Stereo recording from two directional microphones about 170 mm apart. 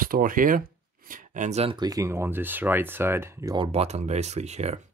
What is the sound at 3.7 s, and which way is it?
Speech, 40° right (ahead or behind).